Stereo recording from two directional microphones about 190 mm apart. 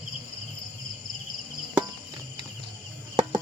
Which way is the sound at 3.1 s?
25° right (ahead or behind).